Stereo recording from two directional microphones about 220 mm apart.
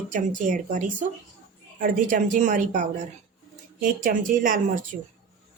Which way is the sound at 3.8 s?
40° right (ahead or behind).